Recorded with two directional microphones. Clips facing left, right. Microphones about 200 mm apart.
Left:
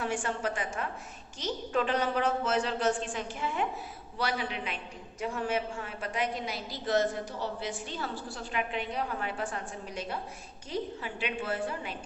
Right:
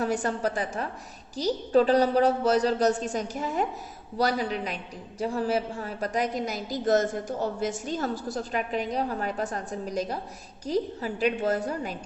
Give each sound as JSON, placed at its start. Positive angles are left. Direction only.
{"t": 0.0, "sound": "a woman's voice", "side_deg": -40}